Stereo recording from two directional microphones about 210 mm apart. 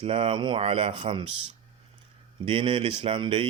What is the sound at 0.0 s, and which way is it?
Speech, 25° right (ahead or behind).